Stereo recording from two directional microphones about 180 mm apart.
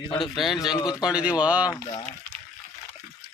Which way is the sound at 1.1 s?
5° right (ahead or behind).